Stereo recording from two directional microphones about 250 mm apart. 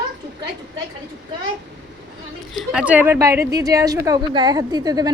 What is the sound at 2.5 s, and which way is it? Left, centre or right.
A woman's voice, centre.